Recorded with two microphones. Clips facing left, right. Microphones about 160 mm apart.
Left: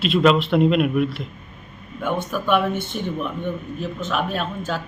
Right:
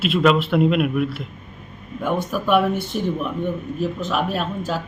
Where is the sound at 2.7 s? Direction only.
35° right (ahead or behind).